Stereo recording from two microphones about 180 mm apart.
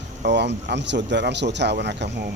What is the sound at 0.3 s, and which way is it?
Speech, 75° right (ahead or behind).